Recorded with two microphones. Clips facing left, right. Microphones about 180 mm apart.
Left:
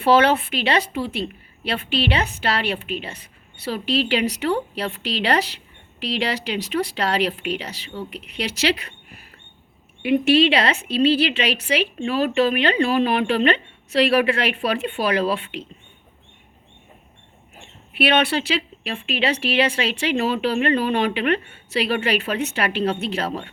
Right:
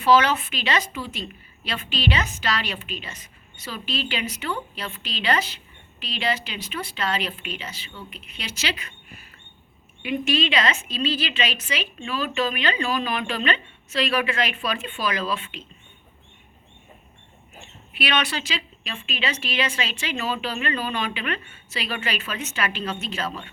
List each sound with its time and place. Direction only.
0.0 s a woman's voice: 60° left (ahead or behind)
10.0 s a woman's voice: 65° left (ahead or behind)
17.9 s a woman's voice: 60° left (ahead or behind)